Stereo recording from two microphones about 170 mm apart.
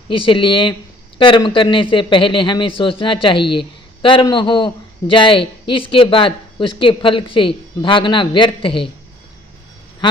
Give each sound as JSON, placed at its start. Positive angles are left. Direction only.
{"t": 0.1, "sound": "speech", "side_deg": 30}